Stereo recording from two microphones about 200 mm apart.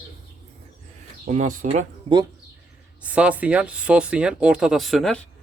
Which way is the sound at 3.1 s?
5° right (ahead or behind).